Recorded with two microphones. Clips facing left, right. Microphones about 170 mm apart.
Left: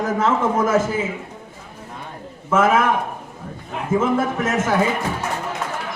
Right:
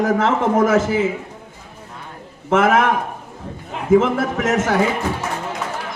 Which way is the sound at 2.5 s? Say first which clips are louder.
Right 2 dB; 70° right (ahead or behind).